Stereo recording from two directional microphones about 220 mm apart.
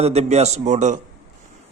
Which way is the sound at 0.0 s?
30° right (ahead or behind).